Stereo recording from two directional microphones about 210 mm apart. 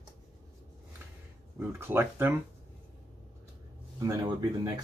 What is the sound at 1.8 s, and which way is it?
Speech, 10° right (ahead or behind).